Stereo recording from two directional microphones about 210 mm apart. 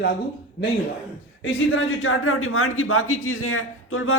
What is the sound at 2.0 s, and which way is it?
A man's voice, 75° left (ahead or behind).